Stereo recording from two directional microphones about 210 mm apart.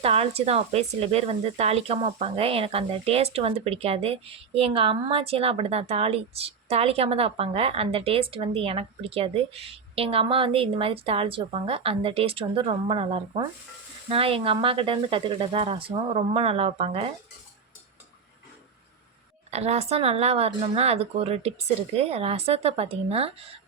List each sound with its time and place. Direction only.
0.0 s speech: 30° right (ahead or behind)
19.5 s speech: 30° right (ahead or behind)